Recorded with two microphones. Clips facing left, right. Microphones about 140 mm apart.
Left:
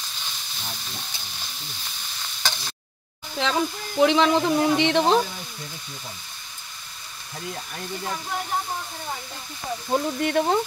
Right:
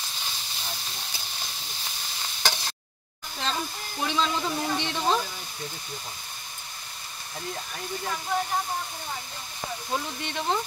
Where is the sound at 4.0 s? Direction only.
70° left (ahead or behind).